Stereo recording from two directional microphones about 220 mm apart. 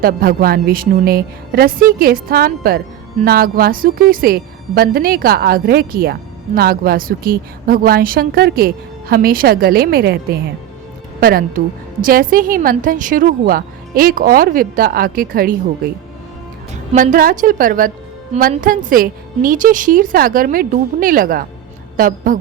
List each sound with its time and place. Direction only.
0.0 s a woman's voice: 40° right (ahead or behind)
16.9 s a woman's voice: 35° right (ahead or behind)